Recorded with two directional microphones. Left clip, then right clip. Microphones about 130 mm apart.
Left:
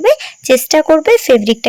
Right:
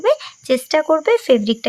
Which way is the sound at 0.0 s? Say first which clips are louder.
Left 6 dB; 25° left (ahead or behind).